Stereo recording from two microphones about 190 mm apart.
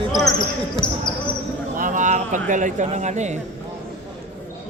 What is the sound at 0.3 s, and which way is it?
Speech, 25° left (ahead or behind).